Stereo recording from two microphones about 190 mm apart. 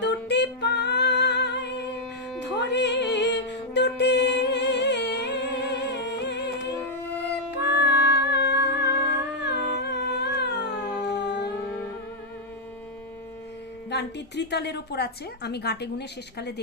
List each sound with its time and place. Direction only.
0.0 s music: 65° left (ahead or behind)
7.6 s music: 65° left (ahead or behind)
11.1 s a sound: 65° left (ahead or behind)
13.9 s a woman's voice: 60° left (ahead or behind)